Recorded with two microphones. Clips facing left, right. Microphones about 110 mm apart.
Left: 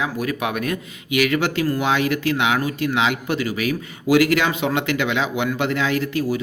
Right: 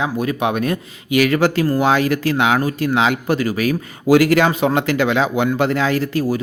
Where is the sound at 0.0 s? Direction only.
25° right (ahead or behind).